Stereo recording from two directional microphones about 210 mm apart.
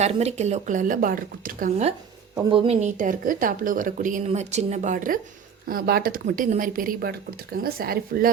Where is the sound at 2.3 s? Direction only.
25° right (ahead or behind).